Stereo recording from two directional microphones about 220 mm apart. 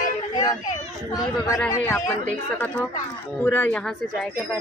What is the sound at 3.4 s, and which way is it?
Speech, 10° left (ahead or behind).